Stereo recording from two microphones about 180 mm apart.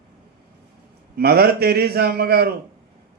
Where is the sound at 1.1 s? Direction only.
60° right (ahead or behind).